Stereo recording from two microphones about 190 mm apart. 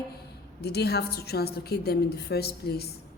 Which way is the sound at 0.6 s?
55° left (ahead or behind).